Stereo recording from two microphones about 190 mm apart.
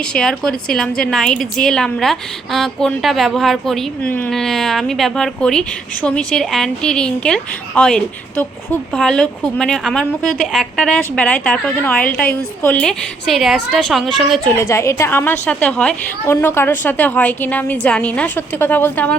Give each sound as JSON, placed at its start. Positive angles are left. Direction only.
{"t": 0.0, "sound": "a woman's voice", "side_deg": 5}
{"t": 14.6, "sound": "a woman's voice", "side_deg": 15}